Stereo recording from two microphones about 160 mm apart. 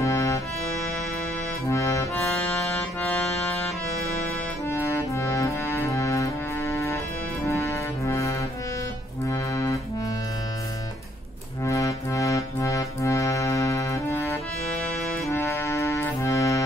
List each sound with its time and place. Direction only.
0.0 s accordion: 20° left (ahead or behind)
1.7 s accordion: 20° left (ahead or behind)
2.2 s music: 5° left (ahead or behind)
4.6 s accordion: 15° left (ahead or behind)
11.6 s accordion: 20° left (ahead or behind)